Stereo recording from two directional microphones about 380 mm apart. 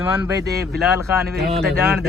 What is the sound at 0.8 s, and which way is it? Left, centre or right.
A man's voice, centre.